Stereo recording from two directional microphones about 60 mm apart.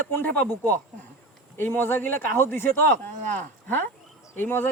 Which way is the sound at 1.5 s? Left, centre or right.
Left.